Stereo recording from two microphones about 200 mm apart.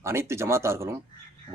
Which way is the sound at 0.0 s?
15° right (ahead or behind).